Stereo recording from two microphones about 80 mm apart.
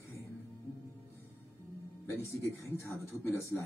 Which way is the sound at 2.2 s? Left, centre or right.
Left.